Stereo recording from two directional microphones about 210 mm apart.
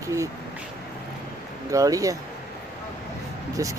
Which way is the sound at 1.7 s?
15° right (ahead or behind).